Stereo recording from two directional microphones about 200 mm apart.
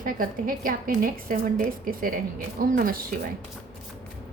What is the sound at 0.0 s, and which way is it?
A woman's voice, 45° right (ahead or behind).